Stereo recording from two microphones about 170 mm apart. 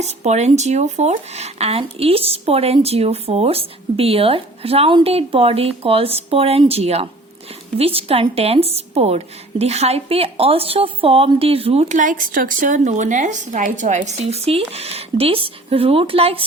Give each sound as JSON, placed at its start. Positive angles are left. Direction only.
{"t": 0.0, "sound": "a woman's voice", "side_deg": -40}